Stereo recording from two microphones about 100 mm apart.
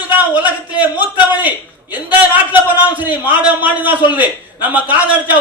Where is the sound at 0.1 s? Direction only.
15° right (ahead or behind).